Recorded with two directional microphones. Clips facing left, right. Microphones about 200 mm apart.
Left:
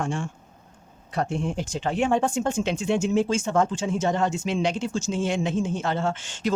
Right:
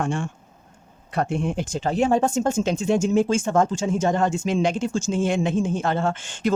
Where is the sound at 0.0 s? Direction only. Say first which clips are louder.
Right 3 dB; 60° right (ahead or behind).